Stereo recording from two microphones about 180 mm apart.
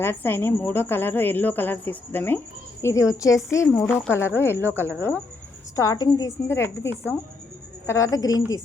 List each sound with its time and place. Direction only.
0.0 s a woman's voice: 15° left (ahead or behind)
4.6 s a woman's voice: 15° right (ahead or behind)
5.7 s a woman's voice: 20° left (ahead or behind)